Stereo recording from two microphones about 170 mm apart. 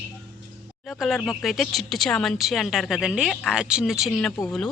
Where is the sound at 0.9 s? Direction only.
Centre (ahead or behind).